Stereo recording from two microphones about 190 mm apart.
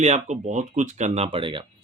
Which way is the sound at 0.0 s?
35° right (ahead or behind).